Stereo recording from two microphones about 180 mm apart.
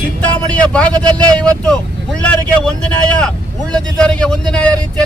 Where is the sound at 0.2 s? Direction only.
5° left (ahead or behind).